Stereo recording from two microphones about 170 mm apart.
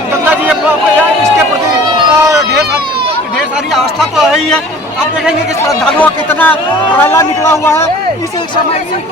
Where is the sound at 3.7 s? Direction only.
Centre (ahead or behind).